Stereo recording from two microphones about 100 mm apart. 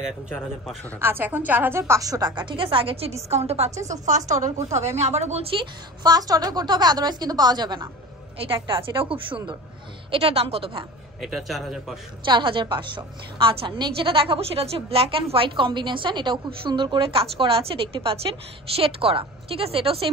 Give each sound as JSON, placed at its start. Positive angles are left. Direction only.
{"t": 0.9, "sound": "a woman's voice", "side_deg": -20}
{"t": 3.2, "sound": "a woman's voice", "side_deg": -90}
{"t": 3.7, "sound": "a woman's voice", "side_deg": -30}
{"t": 4.8, "sound": "a woman's voice", "side_deg": -90}
{"t": 6.0, "sound": "a woman's voice", "side_deg": -40}
{"t": 8.6, "sound": "a woman's voice", "side_deg": -60}
{"t": 10.1, "sound": "speech", "side_deg": -75}
{"t": 11.2, "sound": "a man's voice", "side_deg": 0}
{"t": 12.3, "sound": "a woman's voice", "side_deg": -55}